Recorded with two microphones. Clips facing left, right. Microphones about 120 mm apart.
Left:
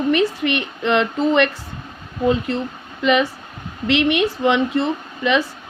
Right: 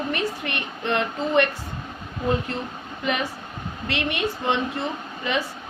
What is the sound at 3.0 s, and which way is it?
Speech, 90° left.